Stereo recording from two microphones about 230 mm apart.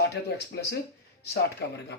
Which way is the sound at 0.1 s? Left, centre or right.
Left.